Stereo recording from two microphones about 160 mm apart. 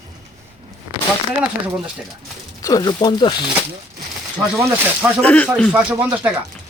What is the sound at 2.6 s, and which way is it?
Speech, 25° left (ahead or behind).